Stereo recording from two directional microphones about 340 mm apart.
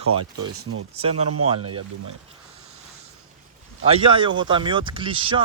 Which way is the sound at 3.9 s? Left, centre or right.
Centre.